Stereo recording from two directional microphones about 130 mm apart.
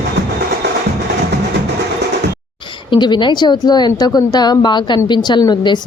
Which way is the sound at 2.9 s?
35° left (ahead or behind).